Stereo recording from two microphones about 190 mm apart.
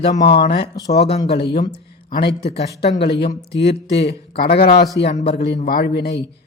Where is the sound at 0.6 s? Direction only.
20° left (ahead or behind).